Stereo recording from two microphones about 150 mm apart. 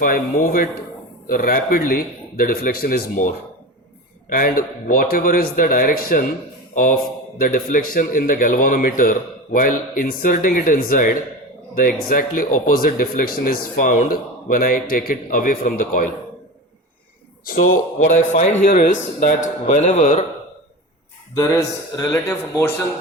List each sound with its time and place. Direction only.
0.0 s speech: 75° left (ahead or behind)
7.3 s speech: 65° left (ahead or behind)
17.4 s speech: 75° left (ahead or behind)
18.0 s a man's voice: 60° left (ahead or behind)
21.3 s a man's voice: 25° left (ahead or behind)